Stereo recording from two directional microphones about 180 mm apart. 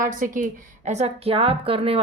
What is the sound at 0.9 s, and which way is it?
A woman's voice, 35° right (ahead or behind).